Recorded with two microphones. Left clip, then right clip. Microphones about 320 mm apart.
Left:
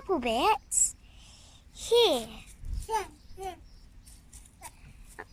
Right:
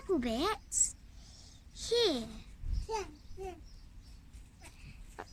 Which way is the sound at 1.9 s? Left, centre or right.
Centre.